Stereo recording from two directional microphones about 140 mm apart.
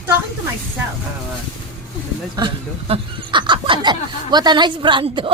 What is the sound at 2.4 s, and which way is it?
Speech, 35° right (ahead or behind).